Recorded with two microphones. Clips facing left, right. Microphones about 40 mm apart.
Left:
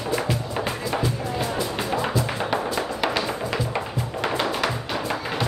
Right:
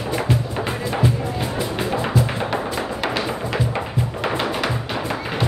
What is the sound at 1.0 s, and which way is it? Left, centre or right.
Music, right.